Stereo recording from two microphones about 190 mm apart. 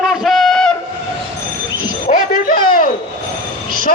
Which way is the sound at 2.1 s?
45° left (ahead or behind).